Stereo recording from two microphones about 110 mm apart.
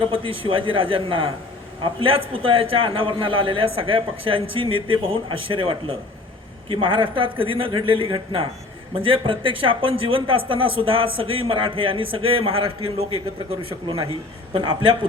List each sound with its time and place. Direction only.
0.2 s a man's voice: 55° right (ahead or behind)
14.5 s a man's voice: 40° right (ahead or behind)